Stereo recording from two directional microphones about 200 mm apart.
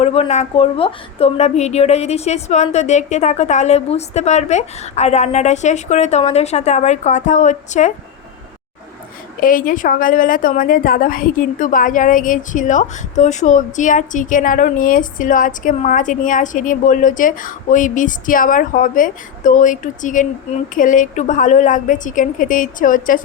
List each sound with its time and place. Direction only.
0.0 s a woman's voice: 30° left (ahead or behind)
9.4 s a woman's voice: 45° left (ahead or behind)